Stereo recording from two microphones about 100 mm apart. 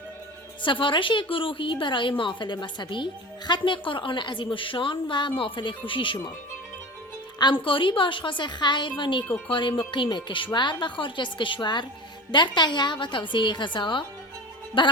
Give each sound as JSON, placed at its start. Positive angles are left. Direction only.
{"t": 0.6, "sound": "a woman's voice", "side_deg": 55}
{"t": 7.3, "sound": "a woman's voice", "side_deg": 50}